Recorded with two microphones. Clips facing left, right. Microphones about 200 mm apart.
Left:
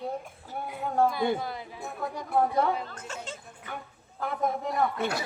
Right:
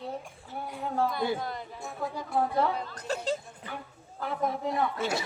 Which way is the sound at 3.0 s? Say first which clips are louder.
Right 8 dB; 35° right (ahead or behind).